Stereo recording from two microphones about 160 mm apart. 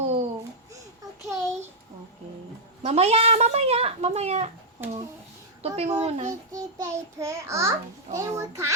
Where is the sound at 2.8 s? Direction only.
40° right (ahead or behind).